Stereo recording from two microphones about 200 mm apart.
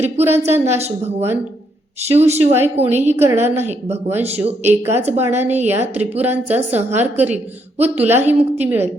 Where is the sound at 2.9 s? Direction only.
10° right (ahead or behind).